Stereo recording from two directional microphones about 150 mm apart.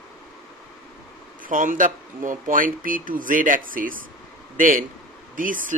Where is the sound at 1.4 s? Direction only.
60° right (ahead or behind).